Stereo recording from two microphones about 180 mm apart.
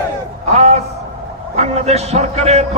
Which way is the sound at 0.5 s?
35° right (ahead or behind).